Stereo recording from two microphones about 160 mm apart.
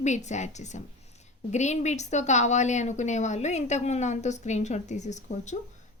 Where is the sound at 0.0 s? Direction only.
45° left (ahead or behind).